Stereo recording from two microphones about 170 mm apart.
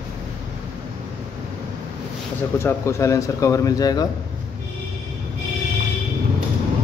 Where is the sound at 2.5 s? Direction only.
15° left (ahead or behind).